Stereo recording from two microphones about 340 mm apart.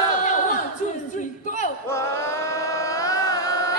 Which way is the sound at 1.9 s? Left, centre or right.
Centre.